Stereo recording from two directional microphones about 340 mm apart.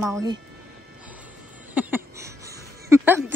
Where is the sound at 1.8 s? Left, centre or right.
Centre.